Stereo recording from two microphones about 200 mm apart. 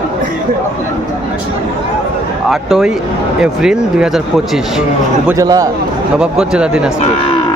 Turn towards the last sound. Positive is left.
turn(degrees=-5)  # may be behind; listen again after turning